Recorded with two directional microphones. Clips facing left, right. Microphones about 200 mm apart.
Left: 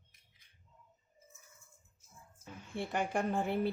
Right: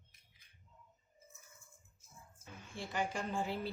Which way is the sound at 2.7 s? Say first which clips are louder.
Left 5 dB; 60° left (ahead or behind).